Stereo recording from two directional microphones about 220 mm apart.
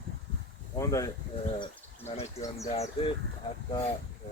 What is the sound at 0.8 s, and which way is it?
Speech, 15° left (ahead or behind).